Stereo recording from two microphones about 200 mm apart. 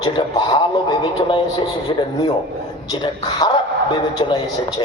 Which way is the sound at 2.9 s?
20° left (ahead or behind).